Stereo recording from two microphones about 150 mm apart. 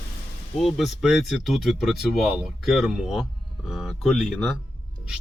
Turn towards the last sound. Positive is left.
turn(degrees=0)  # may be behind; listen again after turning